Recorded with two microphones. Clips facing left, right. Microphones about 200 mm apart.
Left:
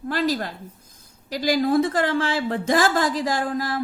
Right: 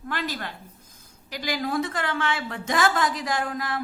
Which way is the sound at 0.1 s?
35° left (ahead or behind).